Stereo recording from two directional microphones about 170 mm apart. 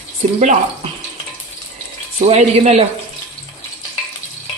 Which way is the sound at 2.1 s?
40° right (ahead or behind).